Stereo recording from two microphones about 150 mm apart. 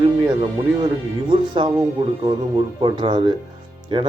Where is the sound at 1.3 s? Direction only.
35° right (ahead or behind).